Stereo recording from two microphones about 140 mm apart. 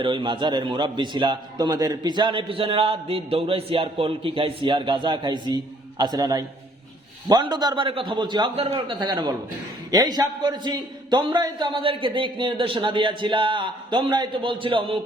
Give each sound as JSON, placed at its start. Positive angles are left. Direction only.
{"t": 0.0, "sound": "a man's voice", "side_deg": -35}